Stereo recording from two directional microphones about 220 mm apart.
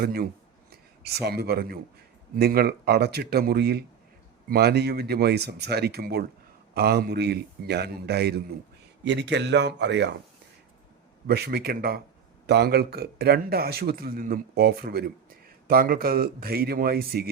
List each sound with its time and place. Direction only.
0.0 s a man's voice: 45° right (ahead or behind)
11.3 s a man's voice: 45° right (ahead or behind)